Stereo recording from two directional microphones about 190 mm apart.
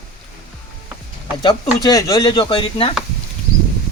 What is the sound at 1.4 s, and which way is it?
Speech, 20° left (ahead or behind).